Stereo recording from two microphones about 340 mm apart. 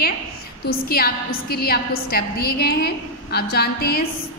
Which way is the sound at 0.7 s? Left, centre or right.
Left.